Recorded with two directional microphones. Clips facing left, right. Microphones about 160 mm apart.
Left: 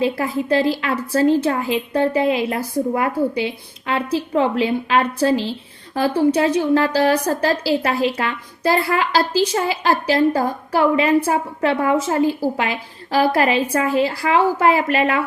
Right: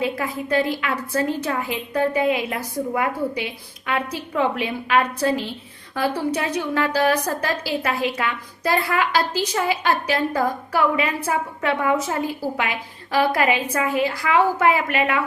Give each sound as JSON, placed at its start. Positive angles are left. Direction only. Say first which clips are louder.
{"t": 0.0, "sound": "a woman's voice", "louder": "left 5 dB", "side_deg": 30}